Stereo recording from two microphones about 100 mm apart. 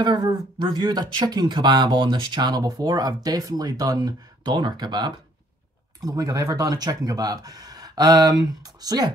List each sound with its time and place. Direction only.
0.0 s speech: 45° right (ahead or behind)
6.0 s speech: 40° right (ahead or behind)